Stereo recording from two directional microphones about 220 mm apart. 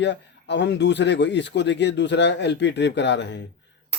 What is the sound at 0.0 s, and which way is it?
Speech, 55° left (ahead or behind).